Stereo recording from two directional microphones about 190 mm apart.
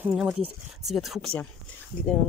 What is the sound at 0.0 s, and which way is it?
Speech, 5° right (ahead or behind).